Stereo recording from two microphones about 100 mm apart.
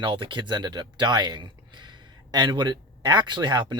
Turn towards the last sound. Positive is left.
turn(degrees=-45)  # may be behind; listen again after turning